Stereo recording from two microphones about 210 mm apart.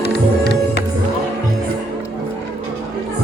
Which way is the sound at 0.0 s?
50° left (ahead or behind).